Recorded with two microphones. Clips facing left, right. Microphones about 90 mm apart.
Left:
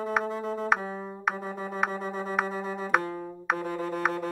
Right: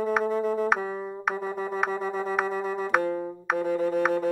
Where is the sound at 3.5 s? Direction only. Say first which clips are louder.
Right 6 dB; centre (ahead or behind).